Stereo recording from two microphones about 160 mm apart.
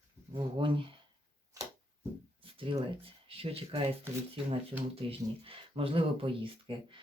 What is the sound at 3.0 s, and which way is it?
Speech, 35° right (ahead or behind).